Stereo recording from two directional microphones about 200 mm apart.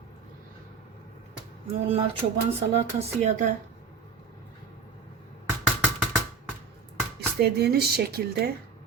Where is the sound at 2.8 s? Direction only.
35° right (ahead or behind).